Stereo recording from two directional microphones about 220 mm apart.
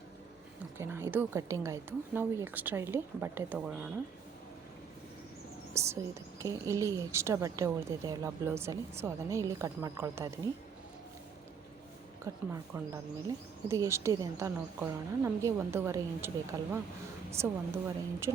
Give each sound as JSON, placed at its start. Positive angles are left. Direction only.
{"t": 0.8, "sound": "a woman's voice", "side_deg": -10}
{"t": 5.7, "sound": "a woman's voice", "side_deg": -10}
{"t": 12.3, "sound": "a woman's voice", "side_deg": -15}